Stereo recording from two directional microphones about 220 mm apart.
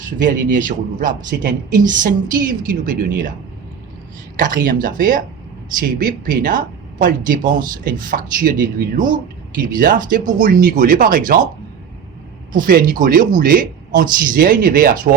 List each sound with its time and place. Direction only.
0.2 s speech: 35° right (ahead or behind)
4.4 s speech: 40° right (ahead or behind)
12.5 s speech: 40° right (ahead or behind)